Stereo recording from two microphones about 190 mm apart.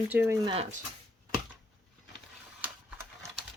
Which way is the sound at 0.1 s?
10° right (ahead or behind).